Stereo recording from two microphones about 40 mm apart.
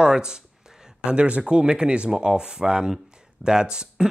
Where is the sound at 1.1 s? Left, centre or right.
Right.